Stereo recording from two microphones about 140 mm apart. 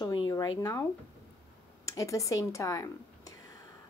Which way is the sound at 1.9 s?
20° left (ahead or behind).